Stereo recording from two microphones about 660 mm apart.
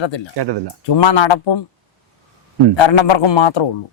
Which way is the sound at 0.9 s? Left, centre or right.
Left.